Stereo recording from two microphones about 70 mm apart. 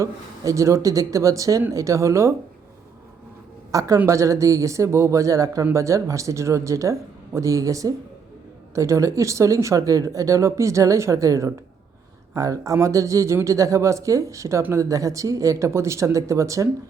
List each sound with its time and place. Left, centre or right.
0.0 s speech: right
3.7 s a woman's voice: right
3.9 s speech: right